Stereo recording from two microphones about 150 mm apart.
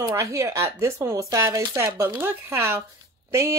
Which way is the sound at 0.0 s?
20° right (ahead or behind).